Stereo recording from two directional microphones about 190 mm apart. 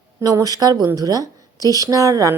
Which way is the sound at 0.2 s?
20° right (ahead or behind).